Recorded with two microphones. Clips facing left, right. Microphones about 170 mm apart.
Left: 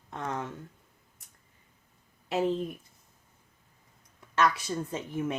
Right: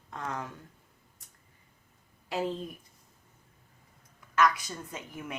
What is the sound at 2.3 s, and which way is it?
Speech, 25° left (ahead or behind).